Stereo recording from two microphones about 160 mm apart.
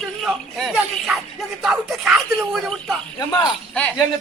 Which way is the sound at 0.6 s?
5° right (ahead or behind).